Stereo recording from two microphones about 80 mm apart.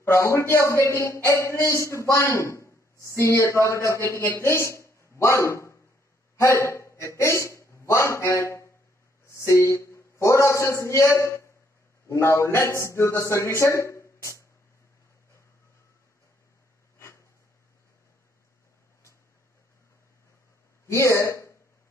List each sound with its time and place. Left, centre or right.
0.0 s a man's voice: left
20.8 s speech: left